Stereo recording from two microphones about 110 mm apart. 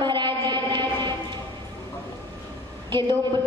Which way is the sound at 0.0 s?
45° right (ahead or behind).